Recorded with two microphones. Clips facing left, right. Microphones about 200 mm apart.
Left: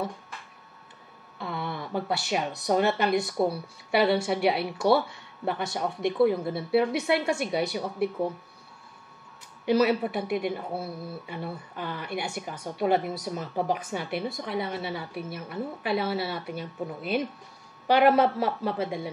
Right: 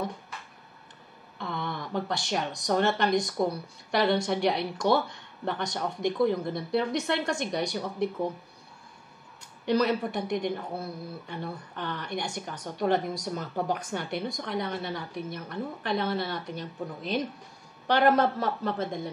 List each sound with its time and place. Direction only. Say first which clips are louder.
1.4 s a sound: left 1 dB; 5° left (ahead or behind)
2.6 s a woman's voice: left 1 dB; 5° left (ahead or behind)
9.7 s a woman's voice: left 3 dB; 5° left (ahead or behind)